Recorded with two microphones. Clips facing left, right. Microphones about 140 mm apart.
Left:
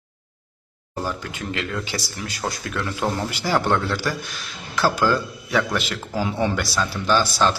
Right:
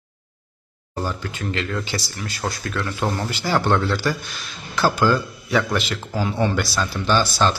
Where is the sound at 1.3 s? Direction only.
10° left (ahead or behind).